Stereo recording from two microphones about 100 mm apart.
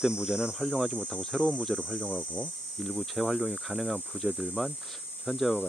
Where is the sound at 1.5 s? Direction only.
5° left (ahead or behind).